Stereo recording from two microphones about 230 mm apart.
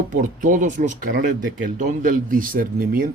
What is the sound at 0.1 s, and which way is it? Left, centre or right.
Speech, right.